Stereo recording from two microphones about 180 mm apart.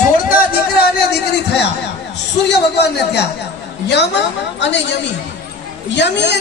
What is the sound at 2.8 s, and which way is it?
Speech, 70° left (ahead or behind).